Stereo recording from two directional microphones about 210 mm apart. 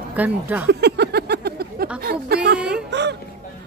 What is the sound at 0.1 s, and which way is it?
Speech, 5° right (ahead or behind).